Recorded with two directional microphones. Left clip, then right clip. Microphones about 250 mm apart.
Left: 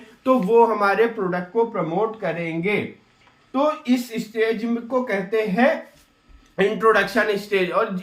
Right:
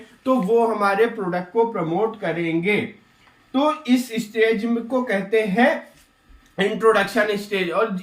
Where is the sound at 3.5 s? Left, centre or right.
Centre.